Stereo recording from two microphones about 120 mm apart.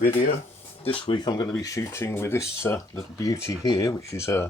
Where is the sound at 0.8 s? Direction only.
50° left (ahead or behind).